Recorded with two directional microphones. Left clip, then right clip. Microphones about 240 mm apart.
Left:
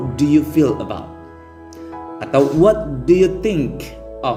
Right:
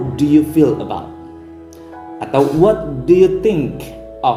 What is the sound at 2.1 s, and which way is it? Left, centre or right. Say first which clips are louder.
Speech: right 1 dB; left.